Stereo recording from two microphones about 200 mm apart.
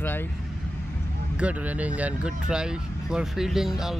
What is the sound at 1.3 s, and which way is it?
Speech, 5° right (ahead or behind).